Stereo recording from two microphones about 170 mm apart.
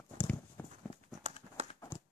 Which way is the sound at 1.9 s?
15° left (ahead or behind).